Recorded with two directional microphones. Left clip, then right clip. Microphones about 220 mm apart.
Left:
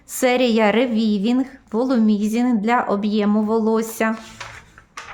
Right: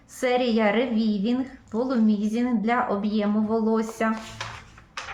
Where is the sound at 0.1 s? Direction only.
55° left (ahead or behind).